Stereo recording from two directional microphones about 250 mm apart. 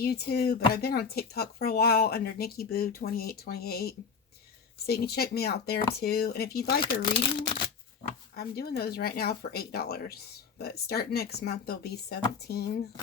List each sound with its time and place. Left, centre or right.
0.0 s speech: left
8.4 s speech: left